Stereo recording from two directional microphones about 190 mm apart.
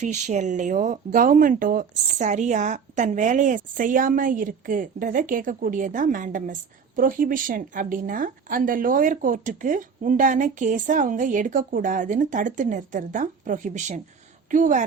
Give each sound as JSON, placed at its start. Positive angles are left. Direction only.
{"t": 0.0, "sound": "speech", "side_deg": -40}